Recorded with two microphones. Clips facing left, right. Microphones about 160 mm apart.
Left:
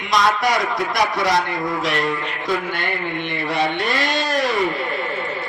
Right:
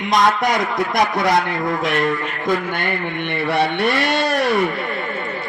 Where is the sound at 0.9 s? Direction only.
50° right (ahead or behind).